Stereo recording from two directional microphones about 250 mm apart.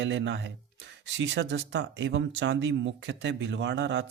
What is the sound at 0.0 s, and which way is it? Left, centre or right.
Speech, right.